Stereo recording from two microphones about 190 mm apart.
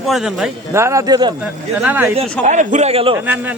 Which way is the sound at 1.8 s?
10° right (ahead or behind).